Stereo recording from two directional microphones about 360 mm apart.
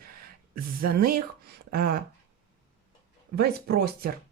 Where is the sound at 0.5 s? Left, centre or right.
Right.